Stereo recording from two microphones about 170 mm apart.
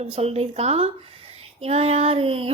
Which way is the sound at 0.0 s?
35° right (ahead or behind).